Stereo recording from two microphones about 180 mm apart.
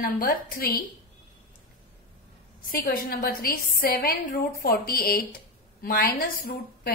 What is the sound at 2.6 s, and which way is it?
A woman's voice, 55° left (ahead or behind).